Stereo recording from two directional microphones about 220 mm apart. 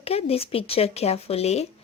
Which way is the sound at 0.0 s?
25° left (ahead or behind).